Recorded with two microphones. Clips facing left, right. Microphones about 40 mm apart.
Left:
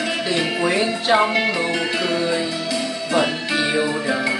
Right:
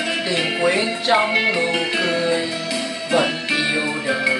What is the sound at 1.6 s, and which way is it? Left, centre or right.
Music, centre.